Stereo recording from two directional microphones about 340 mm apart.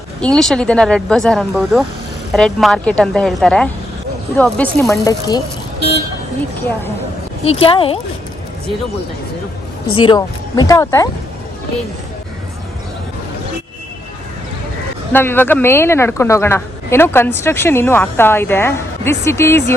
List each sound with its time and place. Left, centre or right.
0.2 s speech: centre
7.4 s a man's voice: centre
9.9 s a man's voice: centre
15.1 s a man's voice: centre